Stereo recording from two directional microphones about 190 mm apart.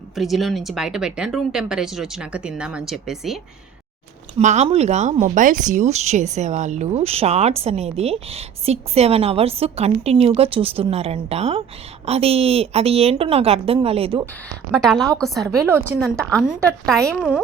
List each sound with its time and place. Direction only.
0.2 s speech: centre (ahead or behind)
4.4 s speech: 35° right (ahead or behind)
14.7 s speech: centre (ahead or behind)
15.5 s a woman's voice: 10° right (ahead or behind)
16.0 s speech: centre (ahead or behind)